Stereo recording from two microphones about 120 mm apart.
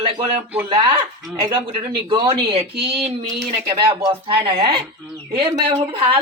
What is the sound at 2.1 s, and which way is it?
Speech, 40° right (ahead or behind).